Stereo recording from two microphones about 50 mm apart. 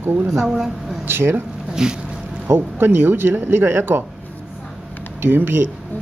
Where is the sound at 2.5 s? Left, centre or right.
Right.